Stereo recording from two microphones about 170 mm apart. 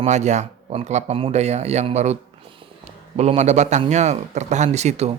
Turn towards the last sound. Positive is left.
turn(degrees=-40)  # may be behind; listen again after turning